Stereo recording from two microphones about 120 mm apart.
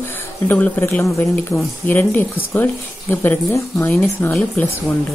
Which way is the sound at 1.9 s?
15° left (ahead or behind).